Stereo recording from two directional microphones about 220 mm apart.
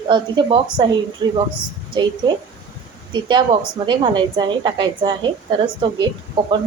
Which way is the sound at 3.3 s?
20° right (ahead or behind).